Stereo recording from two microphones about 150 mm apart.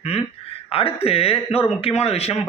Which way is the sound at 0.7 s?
40° left (ahead or behind).